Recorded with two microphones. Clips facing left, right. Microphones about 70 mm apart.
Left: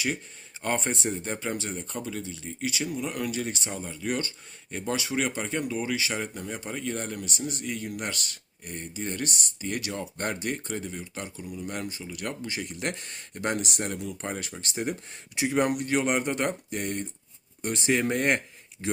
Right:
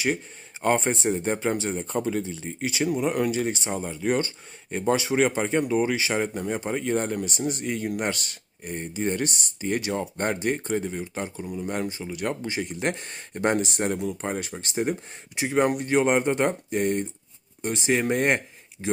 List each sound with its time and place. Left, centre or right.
0.6 s speech: right